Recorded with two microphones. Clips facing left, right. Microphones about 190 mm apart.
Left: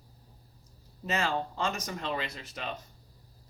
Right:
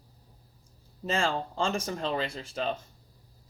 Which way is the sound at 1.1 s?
30° right (ahead or behind).